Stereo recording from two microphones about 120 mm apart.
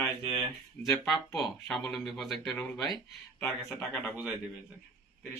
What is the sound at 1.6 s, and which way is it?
Speech, 20° left (ahead or behind).